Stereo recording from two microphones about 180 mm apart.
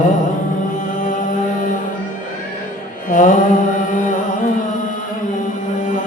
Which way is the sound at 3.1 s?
45° left (ahead or behind).